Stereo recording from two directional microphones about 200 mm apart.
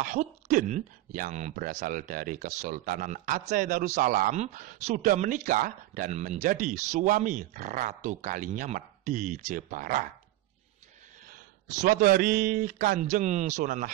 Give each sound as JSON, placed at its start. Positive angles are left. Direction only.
{"t": 0.0, "sound": "speech", "side_deg": -40}
{"t": 11.2, "sound": "a man's voice", "side_deg": -45}